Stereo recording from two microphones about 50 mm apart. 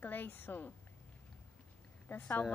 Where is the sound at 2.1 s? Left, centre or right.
Left.